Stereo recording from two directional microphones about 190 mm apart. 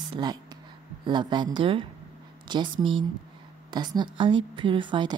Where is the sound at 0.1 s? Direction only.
20° right (ahead or behind).